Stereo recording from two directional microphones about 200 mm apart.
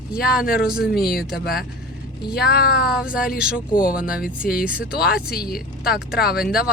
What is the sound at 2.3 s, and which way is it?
Speech, 55° left (ahead or behind).